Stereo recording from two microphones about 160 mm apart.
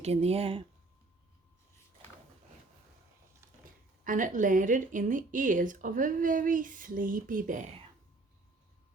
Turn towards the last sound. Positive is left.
turn(degrees=-55)  # may be behind; listen again after turning